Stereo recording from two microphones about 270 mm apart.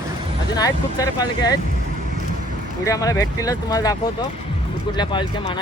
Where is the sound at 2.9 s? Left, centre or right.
Centre.